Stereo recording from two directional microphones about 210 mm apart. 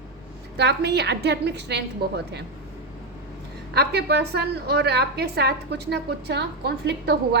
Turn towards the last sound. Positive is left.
turn(degrees=-50)  # may be behind; listen again after turning